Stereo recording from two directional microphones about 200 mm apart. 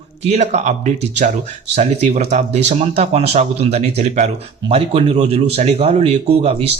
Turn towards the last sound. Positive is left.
turn(degrees=-30)  # may be behind; listen again after turning